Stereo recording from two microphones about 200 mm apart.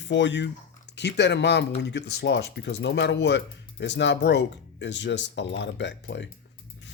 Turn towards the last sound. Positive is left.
turn(degrees=65)  # may be behind; listen again after turning